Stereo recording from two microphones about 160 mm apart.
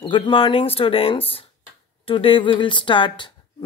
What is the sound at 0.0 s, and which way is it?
Speech, 35° left (ahead or behind).